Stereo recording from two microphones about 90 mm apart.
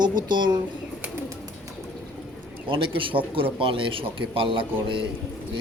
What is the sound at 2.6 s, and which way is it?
A man's voice, 80° right.